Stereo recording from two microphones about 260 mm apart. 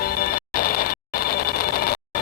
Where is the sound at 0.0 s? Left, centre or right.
Left.